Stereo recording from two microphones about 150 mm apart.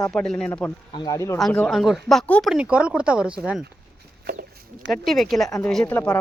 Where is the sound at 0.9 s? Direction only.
25° left (ahead or behind).